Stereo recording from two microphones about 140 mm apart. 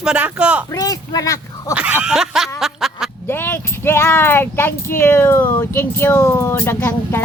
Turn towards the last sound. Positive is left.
turn(degrees=15)  # may be behind; listen again after turning